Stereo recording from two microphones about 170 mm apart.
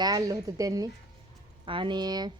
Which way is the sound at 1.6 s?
30° right (ahead or behind).